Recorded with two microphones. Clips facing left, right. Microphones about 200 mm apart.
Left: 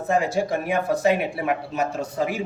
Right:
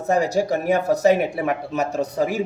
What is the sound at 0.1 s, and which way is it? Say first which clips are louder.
Speech: right 3 dB; 40° right (ahead or behind).